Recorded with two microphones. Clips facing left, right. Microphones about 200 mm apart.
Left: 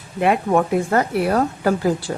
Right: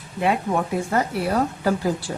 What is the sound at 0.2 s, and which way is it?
Speech, 55° left (ahead or behind).